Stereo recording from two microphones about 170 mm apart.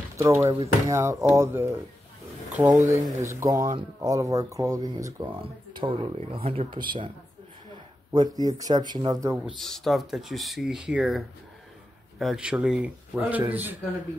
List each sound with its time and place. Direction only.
0.2 s speech: 15° right (ahead or behind)
8.1 s speech: 20° right (ahead or behind)
9.6 s speech: centre (ahead or behind)